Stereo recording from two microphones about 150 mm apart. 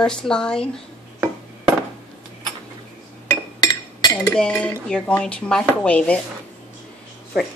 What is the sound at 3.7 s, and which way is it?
Chink, 25° left (ahead or behind).